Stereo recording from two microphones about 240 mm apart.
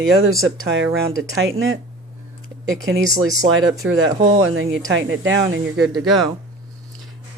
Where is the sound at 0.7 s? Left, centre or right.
Right.